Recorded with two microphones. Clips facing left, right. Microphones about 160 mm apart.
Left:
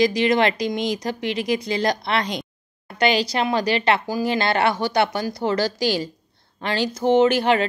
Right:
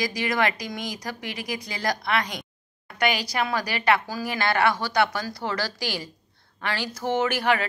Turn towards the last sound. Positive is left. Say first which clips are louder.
# left 7 dB
turn(degrees=25)  # may be behind; listen again after turning